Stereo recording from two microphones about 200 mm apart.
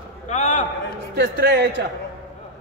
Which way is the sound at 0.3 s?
35° left (ahead or behind).